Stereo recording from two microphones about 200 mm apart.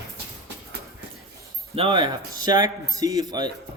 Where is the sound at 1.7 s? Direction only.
25° right (ahead or behind).